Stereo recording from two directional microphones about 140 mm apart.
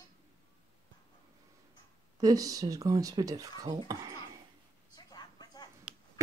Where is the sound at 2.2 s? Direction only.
25° right (ahead or behind).